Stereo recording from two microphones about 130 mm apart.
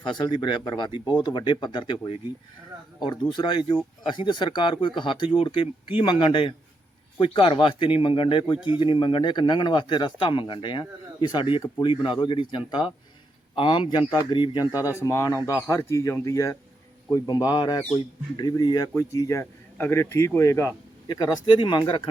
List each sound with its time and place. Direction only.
0.0 s speech: 35° left (ahead or behind)